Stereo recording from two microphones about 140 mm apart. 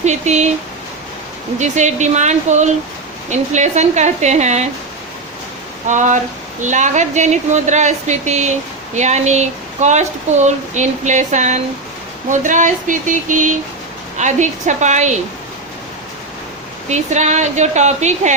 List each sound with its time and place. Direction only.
0.0 s speech: 55° right (ahead or behind)
1.5 s speech: 55° right (ahead or behind)
5.9 s speech: 65° right (ahead or behind)
16.9 s speech: 55° right (ahead or behind)